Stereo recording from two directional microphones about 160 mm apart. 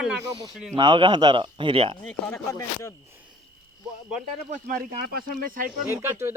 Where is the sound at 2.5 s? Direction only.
15° left (ahead or behind).